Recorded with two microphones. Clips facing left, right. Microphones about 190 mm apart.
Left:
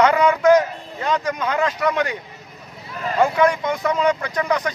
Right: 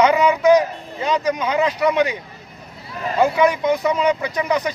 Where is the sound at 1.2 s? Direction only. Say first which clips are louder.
Right 3 dB; 20° right (ahead or behind).